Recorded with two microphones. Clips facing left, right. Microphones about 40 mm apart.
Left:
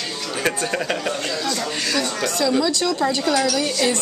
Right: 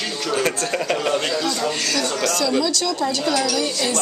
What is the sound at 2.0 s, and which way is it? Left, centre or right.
A woman's voice, centre.